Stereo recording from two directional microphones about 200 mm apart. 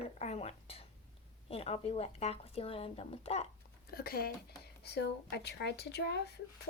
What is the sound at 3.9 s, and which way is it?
Speech, 50° left (ahead or behind).